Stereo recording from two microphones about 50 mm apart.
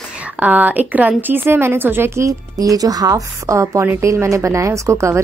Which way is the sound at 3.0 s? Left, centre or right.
Right.